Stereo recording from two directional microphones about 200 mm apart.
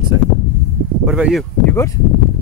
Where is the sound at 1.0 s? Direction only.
5° right (ahead or behind).